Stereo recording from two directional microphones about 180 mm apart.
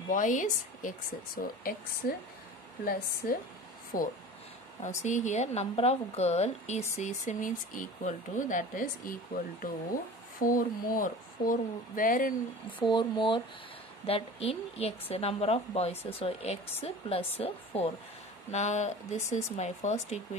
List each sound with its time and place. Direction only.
0.1 s speech: 45° left (ahead or behind)
4.8 s a woman's voice: 40° left (ahead or behind)
12.8 s a woman's voice: 25° left (ahead or behind)